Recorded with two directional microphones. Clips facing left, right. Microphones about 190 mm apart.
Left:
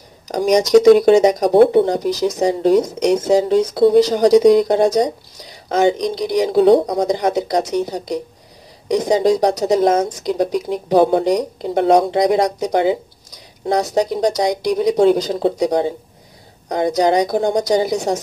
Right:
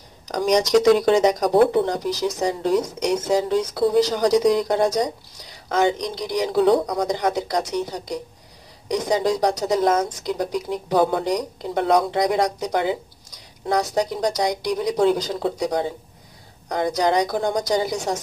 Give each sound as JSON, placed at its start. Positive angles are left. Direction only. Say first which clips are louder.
{"t": 0.9, "sound": "speech", "louder": "left 6 dB", "side_deg": 15}